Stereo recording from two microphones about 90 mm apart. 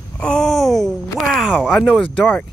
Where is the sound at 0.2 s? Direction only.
5° left (ahead or behind).